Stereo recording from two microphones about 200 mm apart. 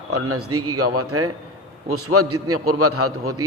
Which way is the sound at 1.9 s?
90° right.